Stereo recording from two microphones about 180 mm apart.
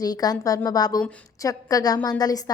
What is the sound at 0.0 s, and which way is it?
A woman's voice, 20° left (ahead or behind).